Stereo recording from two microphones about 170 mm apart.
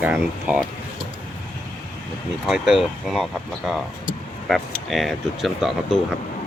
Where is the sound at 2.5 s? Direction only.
Centre (ahead or behind).